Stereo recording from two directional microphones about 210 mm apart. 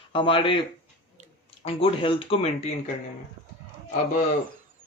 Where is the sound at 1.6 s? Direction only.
25° left (ahead or behind).